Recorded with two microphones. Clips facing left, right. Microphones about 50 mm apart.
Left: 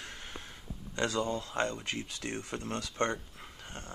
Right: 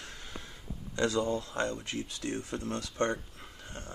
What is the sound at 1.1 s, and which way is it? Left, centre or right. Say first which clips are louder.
Speech: right 3 dB; left.